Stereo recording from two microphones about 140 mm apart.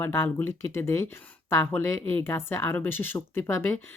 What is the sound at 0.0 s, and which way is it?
Speech, 15° left (ahead or behind).